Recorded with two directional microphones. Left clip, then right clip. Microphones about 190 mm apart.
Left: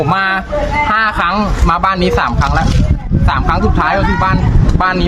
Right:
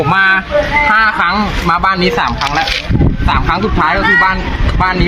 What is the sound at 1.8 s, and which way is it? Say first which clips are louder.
Speech: even; 30° left (ahead or behind).